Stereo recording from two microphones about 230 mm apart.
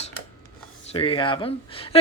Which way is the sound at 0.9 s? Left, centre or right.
Left.